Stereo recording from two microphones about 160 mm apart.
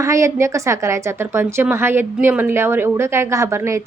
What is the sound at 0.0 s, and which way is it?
A woman's voice, 20° right (ahead or behind).